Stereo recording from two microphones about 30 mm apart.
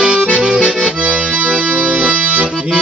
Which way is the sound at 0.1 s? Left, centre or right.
Right.